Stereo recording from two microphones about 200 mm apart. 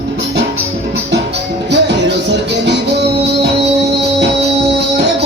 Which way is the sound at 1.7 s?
60° right (ahead or behind).